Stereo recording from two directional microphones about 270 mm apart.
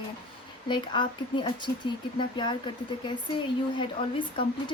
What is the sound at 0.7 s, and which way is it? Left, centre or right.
A woman's voice, centre.